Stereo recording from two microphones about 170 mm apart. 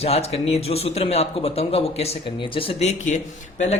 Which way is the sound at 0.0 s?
35° left (ahead or behind).